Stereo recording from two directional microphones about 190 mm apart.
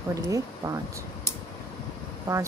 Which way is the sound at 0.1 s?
15° right (ahead or behind).